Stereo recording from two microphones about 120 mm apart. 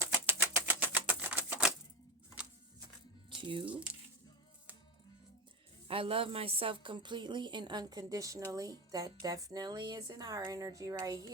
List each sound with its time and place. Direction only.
0.1 s a sound: 15° right (ahead or behind)
3.2 s music: 45° right (ahead or behind)
5.9 s speech: 50° right (ahead or behind)
6.8 s speech: 40° right (ahead or behind)